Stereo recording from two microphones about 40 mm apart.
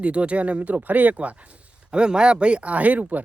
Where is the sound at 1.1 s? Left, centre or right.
Right.